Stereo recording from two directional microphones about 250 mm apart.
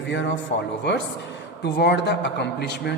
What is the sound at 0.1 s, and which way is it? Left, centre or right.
Speech, left.